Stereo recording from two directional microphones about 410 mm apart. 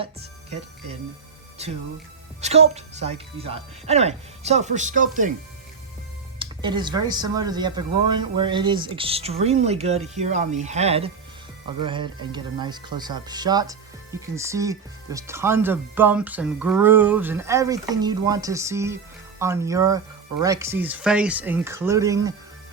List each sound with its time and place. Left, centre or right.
1.6 s speech: centre
6.4 s speech: centre